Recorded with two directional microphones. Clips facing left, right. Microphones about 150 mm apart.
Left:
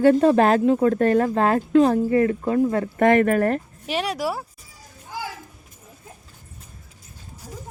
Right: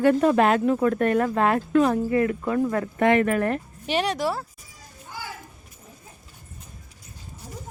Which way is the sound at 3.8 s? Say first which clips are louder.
Right 1 dB; 5° left (ahead or behind).